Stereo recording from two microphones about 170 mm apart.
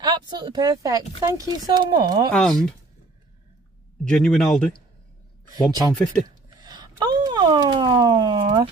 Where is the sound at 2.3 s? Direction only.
5° left (ahead or behind).